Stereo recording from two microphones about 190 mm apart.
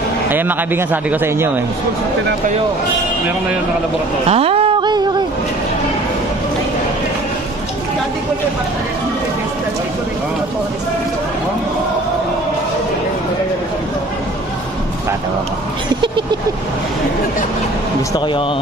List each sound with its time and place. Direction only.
0.3 s speech: 10° right (ahead or behind)
4.3 s a sound: 30° right (ahead or behind)
18.1 s a man's voice: 25° left (ahead or behind)